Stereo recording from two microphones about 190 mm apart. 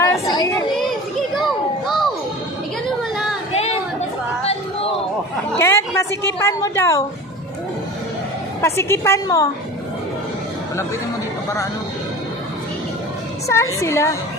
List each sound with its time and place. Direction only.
0.0 s a sound: 20° left (ahead or behind)
5.5 s a woman's voice: 15° left (ahead or behind)
8.6 s a woman's voice: 15° left (ahead or behind)
13.5 s a woman's voice: 15° left (ahead or behind)